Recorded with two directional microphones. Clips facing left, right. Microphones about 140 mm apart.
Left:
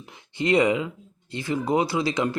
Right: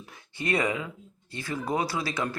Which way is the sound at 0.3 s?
20° left (ahead or behind).